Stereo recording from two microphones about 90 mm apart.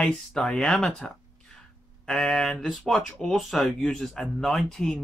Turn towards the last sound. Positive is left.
turn(degrees=5)  # may be behind; listen again after turning